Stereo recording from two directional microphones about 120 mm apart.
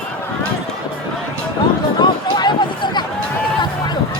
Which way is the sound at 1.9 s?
35° left (ahead or behind).